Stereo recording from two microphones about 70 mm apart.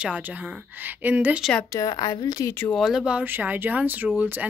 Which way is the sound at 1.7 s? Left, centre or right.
Left.